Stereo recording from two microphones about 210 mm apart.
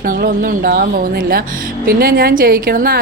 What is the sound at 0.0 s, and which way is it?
A woman's voice, 45° right (ahead or behind).